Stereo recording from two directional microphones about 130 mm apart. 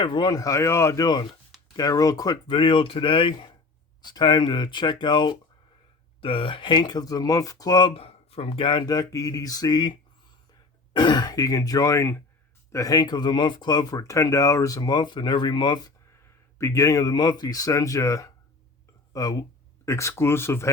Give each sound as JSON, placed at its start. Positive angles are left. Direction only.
{"t": 0.0, "sound": "speech", "side_deg": 35}
{"t": 10.9, "sound": "speech", "side_deg": 35}
{"t": 16.6, "sound": "speech", "side_deg": 25}